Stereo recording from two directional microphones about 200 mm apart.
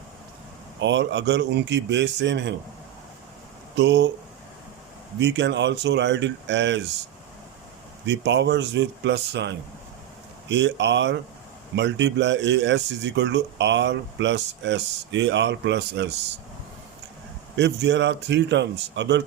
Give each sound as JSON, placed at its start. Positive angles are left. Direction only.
{"t": 0.8, "sound": "speech", "side_deg": -65}
{"t": 3.8, "sound": "speech", "side_deg": -60}
{"t": 5.2, "sound": "speech", "side_deg": -60}
{"t": 8.0, "sound": "speech", "side_deg": -60}
{"t": 17.6, "sound": "speech", "side_deg": -65}